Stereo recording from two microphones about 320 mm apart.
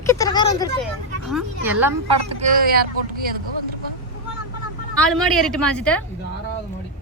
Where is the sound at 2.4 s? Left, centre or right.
Right.